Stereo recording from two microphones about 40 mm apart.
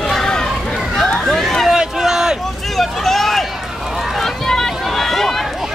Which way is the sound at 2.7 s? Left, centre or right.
Centre.